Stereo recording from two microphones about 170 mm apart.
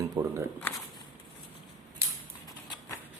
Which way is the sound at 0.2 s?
25° right (ahead or behind).